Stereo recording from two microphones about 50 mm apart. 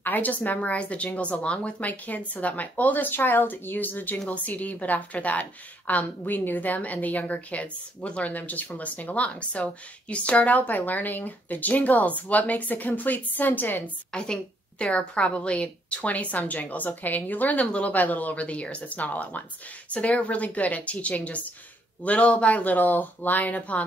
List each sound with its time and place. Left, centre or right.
0.0 s a woman's voice: left
14.1 s a woman's voice: centre; by 17.6 s left
17.6 s a woman's voice: left
17.9 s a woman's voice: left